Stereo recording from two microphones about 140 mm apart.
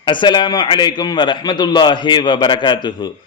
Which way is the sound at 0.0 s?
35° left (ahead or behind).